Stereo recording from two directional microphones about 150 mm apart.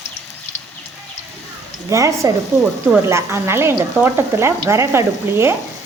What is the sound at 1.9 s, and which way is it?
Speech, 20° right (ahead or behind).